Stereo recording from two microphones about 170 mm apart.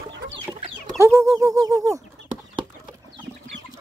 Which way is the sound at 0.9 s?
15° right (ahead or behind).